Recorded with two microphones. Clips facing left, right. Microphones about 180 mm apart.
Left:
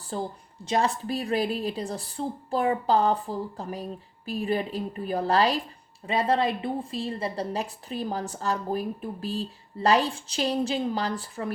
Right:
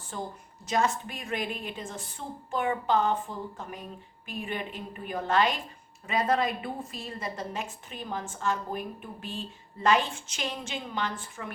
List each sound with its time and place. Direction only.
0.1 s a woman's voice: 30° left (ahead or behind)